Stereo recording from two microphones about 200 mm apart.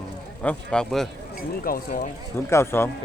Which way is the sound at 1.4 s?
45° left (ahead or behind).